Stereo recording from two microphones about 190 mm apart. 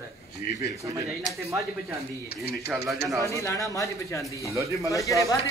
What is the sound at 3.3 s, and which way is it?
Speech, 15° left (ahead or behind).